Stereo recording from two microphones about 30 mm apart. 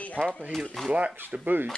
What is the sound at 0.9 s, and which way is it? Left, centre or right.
Speech, right.